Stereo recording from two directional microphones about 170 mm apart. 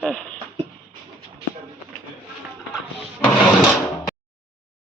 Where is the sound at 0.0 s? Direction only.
5° left (ahead or behind).